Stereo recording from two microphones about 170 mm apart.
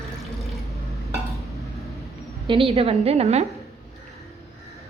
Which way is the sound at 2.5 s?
30° right (ahead or behind).